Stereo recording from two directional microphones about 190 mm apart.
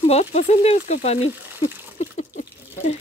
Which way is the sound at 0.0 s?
35° left (ahead or behind).